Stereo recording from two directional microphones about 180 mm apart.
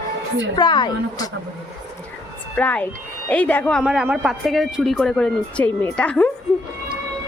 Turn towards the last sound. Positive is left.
turn(degrees=5)  # may be behind; listen again after turning